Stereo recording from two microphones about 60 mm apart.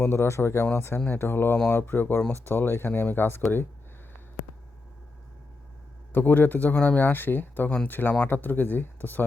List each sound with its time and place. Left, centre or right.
0.0 s speech: left
6.1 s speech: left